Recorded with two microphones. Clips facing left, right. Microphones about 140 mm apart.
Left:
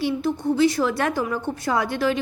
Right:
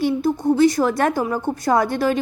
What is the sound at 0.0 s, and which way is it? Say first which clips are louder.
A woman's voice: right 4 dB; 40° right (ahead or behind).